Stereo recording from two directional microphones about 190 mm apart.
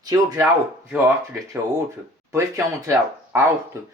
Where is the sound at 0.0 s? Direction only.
20° right (ahead or behind).